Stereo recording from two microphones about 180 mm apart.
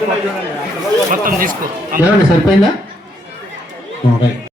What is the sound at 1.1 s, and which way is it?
Speech, 50° right (ahead or behind).